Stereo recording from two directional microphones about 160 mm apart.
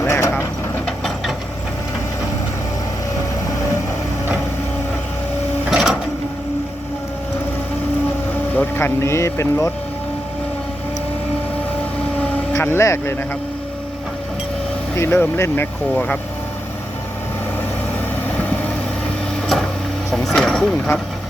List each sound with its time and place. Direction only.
0.0 s vehicle: 15° left (ahead or behind)
0.9 s a sound: centre (ahead or behind)
5.7 s printer: 5° right (ahead or behind)
8.5 s speech: 15° left (ahead or behind)
12.2 s vehicle: 15° left (ahead or behind)
14.9 s speech: 15° left (ahead or behind)
18.3 s vehicle: 10° left (ahead or behind)
20.1 s a sound: centre (ahead or behind)